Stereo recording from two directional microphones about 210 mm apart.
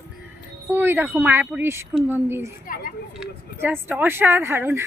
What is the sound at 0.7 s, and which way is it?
Speech, 10° right (ahead or behind).